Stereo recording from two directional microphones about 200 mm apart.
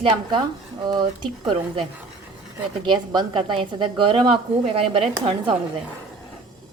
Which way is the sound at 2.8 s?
20° right (ahead or behind).